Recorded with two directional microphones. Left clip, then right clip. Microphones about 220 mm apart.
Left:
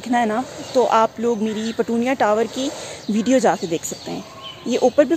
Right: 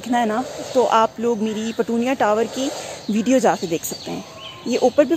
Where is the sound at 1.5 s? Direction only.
25° left (ahead or behind).